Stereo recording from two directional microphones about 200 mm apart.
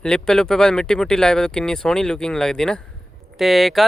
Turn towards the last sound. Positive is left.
turn(degrees=0)  # may be behind; listen again after turning